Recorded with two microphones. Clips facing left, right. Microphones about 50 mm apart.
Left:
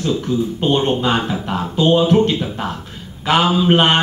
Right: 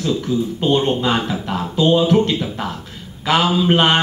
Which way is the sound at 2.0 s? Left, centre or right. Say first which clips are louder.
Left 1 dB; left.